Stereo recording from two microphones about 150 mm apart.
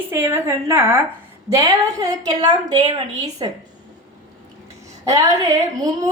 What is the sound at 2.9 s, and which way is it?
Speech, 45° right (ahead or behind).